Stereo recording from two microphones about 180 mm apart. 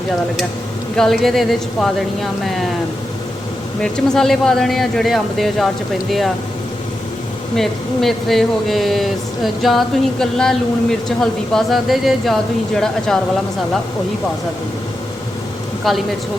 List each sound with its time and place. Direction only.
0.9 s speech: centre (ahead or behind)
3.8 s speech: 5° left (ahead or behind)
7.5 s speech: centre (ahead or behind)
15.9 s speech: centre (ahead or behind)